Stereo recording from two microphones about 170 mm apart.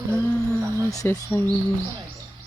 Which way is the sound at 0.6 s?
15° right (ahead or behind).